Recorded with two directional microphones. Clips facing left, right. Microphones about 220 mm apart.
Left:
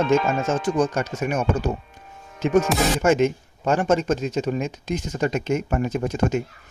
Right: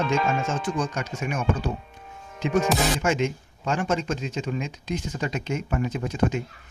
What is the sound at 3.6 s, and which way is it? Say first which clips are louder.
Speech: left 6 dB; 45° left (ahead or behind).